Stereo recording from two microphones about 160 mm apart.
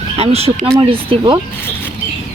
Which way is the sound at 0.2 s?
40° right (ahead or behind).